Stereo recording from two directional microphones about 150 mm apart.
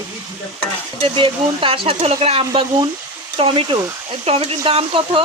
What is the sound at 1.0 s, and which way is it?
Speech, 35° right (ahead or behind).